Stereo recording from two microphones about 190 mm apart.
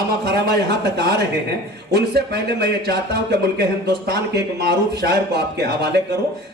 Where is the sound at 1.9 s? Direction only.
60° right (ahead or behind).